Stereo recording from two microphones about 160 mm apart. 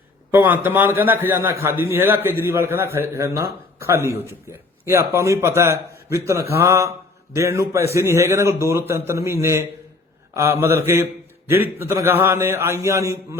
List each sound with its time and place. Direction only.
0.3 s a man's voice: 10° right (ahead or behind)